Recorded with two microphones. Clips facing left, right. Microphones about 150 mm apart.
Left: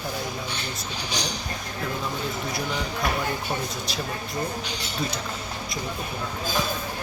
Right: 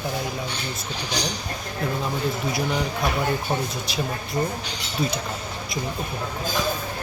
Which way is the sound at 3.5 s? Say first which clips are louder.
Right 3 dB; 20° right (ahead or behind).